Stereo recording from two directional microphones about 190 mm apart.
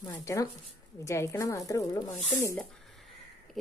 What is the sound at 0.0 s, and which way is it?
A woman's voice, 15° left (ahead or behind).